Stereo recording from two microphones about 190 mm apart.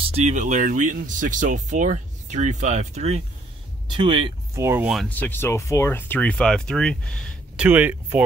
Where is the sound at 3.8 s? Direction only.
25° right (ahead or behind).